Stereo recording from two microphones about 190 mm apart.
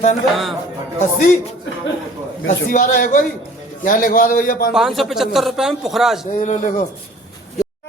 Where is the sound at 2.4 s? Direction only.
40° left (ahead or behind).